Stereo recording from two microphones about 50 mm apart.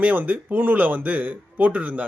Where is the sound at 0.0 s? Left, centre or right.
Right.